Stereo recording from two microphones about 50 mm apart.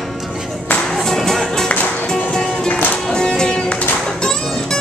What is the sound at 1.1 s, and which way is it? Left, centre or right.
Music, centre.